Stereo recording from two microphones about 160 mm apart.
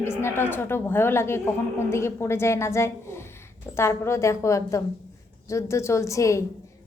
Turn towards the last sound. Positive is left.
turn(degrees=20)  # may be behind; listen again after turning